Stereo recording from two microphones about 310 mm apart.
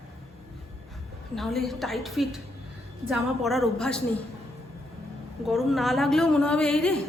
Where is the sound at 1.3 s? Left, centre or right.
Centre.